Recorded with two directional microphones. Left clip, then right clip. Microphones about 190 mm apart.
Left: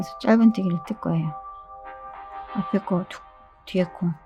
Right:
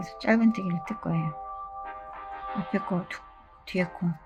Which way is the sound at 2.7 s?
35° left (ahead or behind).